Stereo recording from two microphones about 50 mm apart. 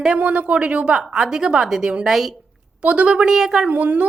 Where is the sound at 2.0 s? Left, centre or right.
Centre.